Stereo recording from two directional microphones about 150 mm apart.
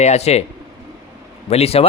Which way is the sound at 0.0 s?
45° left (ahead or behind).